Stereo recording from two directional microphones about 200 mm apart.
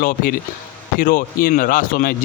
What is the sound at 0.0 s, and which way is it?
A man's voice, 45° left (ahead or behind).